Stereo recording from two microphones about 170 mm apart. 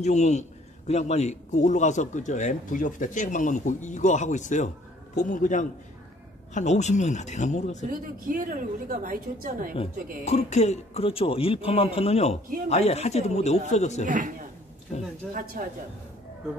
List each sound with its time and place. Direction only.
0.0 s a man's voice: 45° left (ahead or behind)
7.9 s a woman's voice: 55° right (ahead or behind)
10.2 s a man's voice: 40° left (ahead or behind)
14.0 s a man's voice: 50° right (ahead or behind)
15.3 s a woman's voice: 55° right (ahead or behind)